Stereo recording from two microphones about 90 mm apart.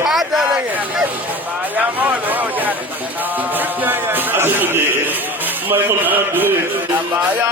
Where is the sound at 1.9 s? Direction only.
20° right (ahead or behind).